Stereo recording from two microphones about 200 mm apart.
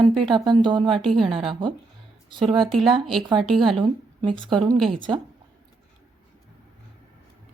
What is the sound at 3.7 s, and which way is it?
A woman's voice, 25° right (ahead or behind).